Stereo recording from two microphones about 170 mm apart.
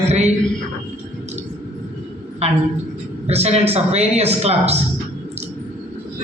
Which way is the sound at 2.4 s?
40° right (ahead or behind).